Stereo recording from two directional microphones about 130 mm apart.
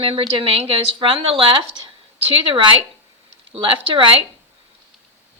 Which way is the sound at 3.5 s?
40° right (ahead or behind).